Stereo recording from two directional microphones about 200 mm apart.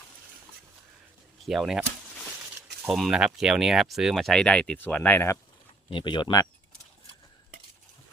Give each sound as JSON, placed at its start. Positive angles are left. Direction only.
{"t": 1.5, "sound": "speech", "side_deg": 0}
{"t": 2.8, "sound": "speech", "side_deg": 0}
{"t": 5.9, "sound": "speech", "side_deg": 25}